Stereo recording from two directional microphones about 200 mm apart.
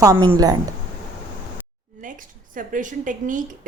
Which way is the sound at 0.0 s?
15° right (ahead or behind).